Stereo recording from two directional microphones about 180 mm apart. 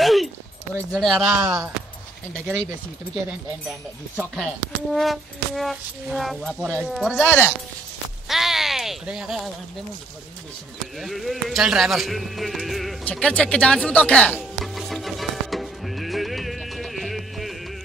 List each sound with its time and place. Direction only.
0.0 s a sound: centre (ahead or behind)
0.9 s speech: centre (ahead or behind)
1.4 s speech: 15° right (ahead or behind)
2.3 s speech: 5° left (ahead or behind)
4.9 s speech: centre (ahead or behind)
11.0 s speech: centre (ahead or behind)
14.3 s music: centre (ahead or behind)